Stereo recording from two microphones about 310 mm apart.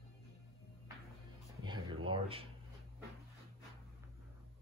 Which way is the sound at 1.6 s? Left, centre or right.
Centre.